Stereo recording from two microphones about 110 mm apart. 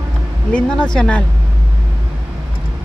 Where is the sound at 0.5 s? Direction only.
5° left (ahead or behind).